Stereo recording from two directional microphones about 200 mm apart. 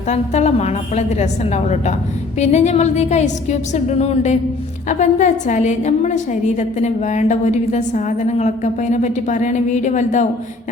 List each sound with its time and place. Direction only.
0.1 s a woman's voice: 35° left (ahead or behind)